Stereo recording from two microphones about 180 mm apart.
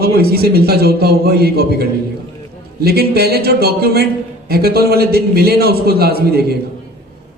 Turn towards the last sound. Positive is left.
turn(degrees=-60)  # may be behind; listen again after turning